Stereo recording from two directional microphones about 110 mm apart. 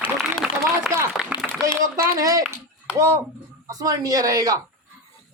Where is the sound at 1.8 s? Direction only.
30° right (ahead or behind).